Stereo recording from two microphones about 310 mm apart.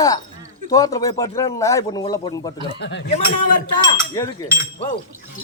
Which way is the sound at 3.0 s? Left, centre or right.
Left.